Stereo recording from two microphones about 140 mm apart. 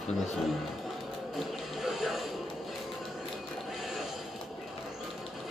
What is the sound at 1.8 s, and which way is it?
Music, centre (ahead or behind).